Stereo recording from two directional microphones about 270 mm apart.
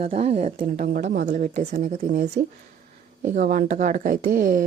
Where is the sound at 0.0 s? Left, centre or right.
Right.